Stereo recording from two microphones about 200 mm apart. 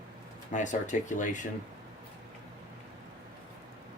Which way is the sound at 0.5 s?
40° left (ahead or behind).